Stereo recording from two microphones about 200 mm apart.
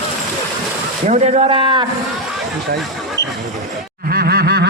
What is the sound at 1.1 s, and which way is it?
Speech, 35° right (ahead or behind).